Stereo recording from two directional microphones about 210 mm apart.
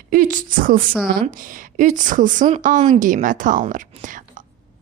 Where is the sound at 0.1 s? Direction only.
40° right (ahead or behind).